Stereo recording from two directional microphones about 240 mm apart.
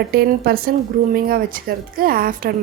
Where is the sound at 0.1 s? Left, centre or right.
Right.